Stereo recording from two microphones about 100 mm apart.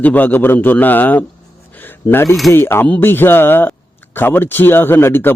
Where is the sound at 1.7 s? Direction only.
20° left (ahead or behind).